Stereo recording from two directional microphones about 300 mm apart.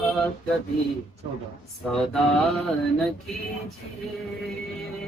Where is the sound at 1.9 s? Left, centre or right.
Centre.